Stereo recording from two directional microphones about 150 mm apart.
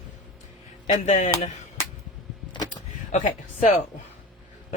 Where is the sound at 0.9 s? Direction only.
55° left (ahead or behind).